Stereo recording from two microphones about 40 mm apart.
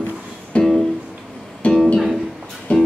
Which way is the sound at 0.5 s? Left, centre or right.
Left.